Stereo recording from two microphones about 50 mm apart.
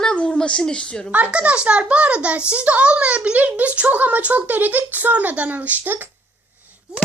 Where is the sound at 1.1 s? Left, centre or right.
Right.